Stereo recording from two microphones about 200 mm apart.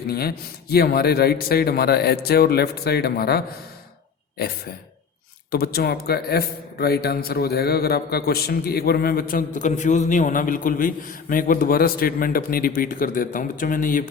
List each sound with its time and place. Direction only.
0.1 s a man's voice: 50° left (ahead or behind)
5.5 s a man's voice: 50° left (ahead or behind)